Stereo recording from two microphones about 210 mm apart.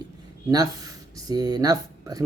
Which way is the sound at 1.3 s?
20° right (ahead or behind).